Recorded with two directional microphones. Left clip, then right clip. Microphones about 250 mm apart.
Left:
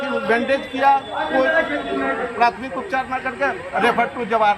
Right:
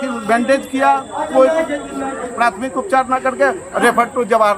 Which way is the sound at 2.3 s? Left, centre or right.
Right.